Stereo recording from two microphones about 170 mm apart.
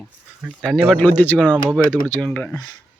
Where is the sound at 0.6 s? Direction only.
Centre (ahead or behind).